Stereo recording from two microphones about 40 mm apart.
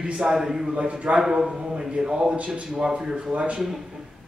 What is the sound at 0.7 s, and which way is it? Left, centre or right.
Speech, right.